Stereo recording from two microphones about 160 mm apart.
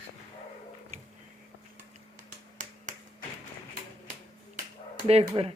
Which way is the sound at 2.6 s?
50° right (ahead or behind).